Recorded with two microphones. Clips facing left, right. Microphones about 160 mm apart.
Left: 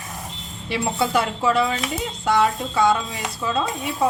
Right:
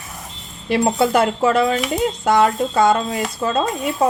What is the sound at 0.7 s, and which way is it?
Speech, 50° right (ahead or behind).